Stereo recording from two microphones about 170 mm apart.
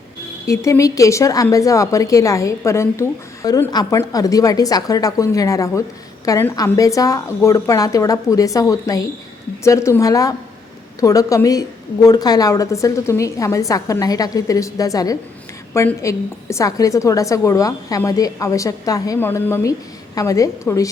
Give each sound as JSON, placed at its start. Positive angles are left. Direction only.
{"t": 0.4, "sound": "a woman's voice", "side_deg": 20}